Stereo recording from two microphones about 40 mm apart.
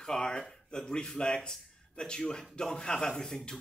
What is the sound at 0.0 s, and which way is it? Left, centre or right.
A man's voice, centre.